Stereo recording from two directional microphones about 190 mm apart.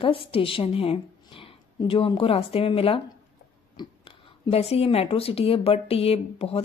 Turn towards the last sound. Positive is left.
turn(degrees=30)  # may be behind; listen again after turning